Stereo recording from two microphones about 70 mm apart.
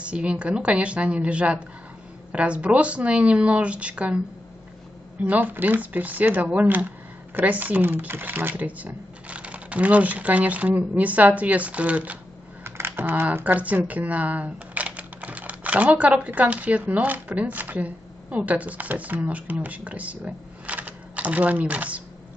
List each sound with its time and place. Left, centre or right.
0.0 s a woman's voice: centre
5.2 s speech: right
12.6 s speech: right